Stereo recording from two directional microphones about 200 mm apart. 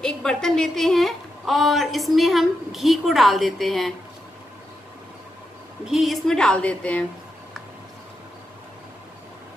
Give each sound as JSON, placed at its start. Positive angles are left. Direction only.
{"t": 0.0, "sound": "a woman's voice", "side_deg": 5}
{"t": 5.9, "sound": "a woman's voice", "side_deg": 0}